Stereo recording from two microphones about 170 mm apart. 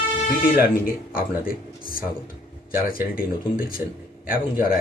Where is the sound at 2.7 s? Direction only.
60° left (ahead or behind).